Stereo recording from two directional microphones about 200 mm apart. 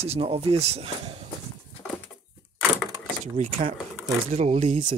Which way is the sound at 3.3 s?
35° right (ahead or behind).